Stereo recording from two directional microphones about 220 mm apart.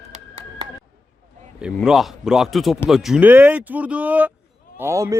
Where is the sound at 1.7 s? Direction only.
Centre (ahead or behind).